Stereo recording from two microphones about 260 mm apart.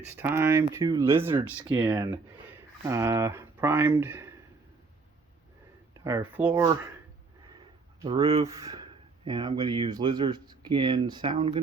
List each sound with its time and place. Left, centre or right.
0.2 s speech: centre
6.1 s speech: centre
8.0 s speech: centre